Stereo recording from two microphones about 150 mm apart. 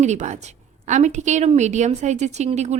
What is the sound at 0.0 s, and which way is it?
A woman's voice, 50° right (ahead or behind).